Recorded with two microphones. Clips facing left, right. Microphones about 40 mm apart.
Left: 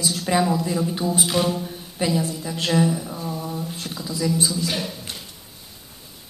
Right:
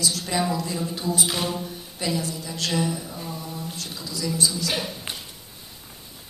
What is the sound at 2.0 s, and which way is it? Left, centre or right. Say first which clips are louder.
Speech: left 4 dB; centre.